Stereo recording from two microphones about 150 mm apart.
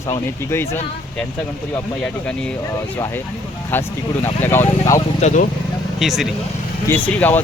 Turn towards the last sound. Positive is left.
turn(degrees=10)  # may be behind; listen again after turning